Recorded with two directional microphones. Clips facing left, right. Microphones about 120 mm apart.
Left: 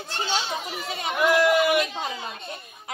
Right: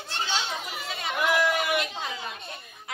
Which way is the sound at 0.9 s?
20° left (ahead or behind).